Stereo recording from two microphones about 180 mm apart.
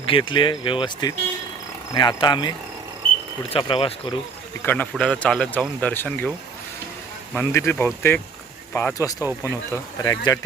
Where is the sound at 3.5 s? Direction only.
30° left (ahead or behind).